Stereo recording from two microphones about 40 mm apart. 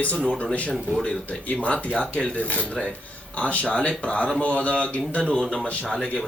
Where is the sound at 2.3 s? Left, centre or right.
Left.